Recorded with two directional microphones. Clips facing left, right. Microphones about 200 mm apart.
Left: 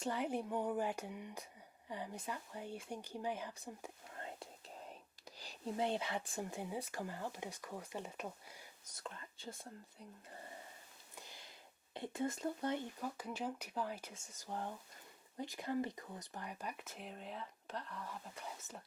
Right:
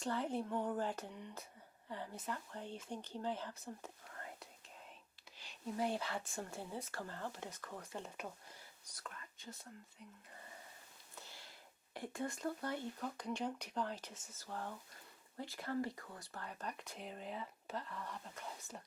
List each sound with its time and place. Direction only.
0.0 s speech: 15° left (ahead or behind)
4.2 s whispering: 25° left (ahead or behind)
5.4 s whispering: 40° left (ahead or behind)
5.7 s speech: 20° left (ahead or behind)
9.0 s speech: 30° left (ahead or behind)
11.1 s a sound: 15° left (ahead or behind)
11.9 s speech: 20° left (ahead or behind)
13.0 s speech: 5° left (ahead or behind)